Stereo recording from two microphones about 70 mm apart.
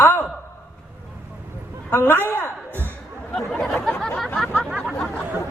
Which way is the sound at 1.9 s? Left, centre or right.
Left.